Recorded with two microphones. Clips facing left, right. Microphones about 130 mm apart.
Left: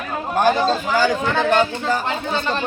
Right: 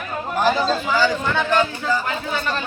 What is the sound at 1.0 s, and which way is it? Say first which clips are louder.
Speech: left 2 dB; 50° left (ahead or behind).